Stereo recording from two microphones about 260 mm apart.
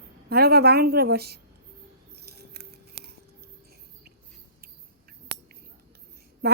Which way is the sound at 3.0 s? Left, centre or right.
Right.